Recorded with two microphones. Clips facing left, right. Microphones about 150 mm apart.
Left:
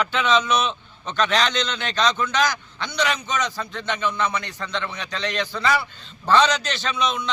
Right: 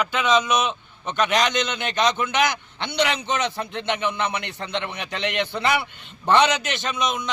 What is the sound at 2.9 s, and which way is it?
Speech, 60° right (ahead or behind).